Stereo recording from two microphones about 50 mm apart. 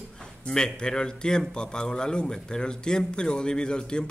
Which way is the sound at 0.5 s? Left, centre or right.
Centre.